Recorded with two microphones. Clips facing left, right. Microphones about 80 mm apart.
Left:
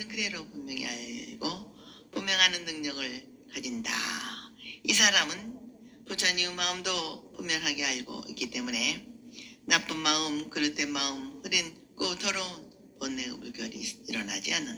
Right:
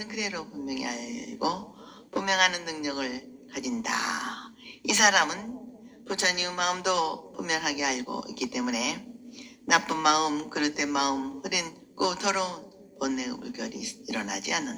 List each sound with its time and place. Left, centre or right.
0.0 s a woman's voice: right